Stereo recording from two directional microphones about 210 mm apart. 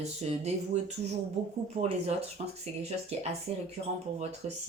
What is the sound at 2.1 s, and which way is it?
Speech, 30° right (ahead or behind).